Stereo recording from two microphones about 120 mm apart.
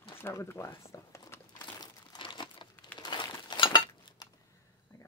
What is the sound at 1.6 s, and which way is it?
Crumpling, 40° left (ahead or behind).